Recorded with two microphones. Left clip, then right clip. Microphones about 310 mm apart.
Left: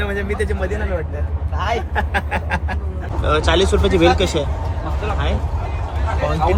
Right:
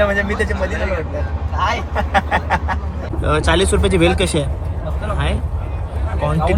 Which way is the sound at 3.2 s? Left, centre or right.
Right.